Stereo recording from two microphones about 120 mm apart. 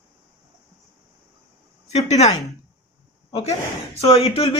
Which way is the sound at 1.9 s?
65° left (ahead or behind).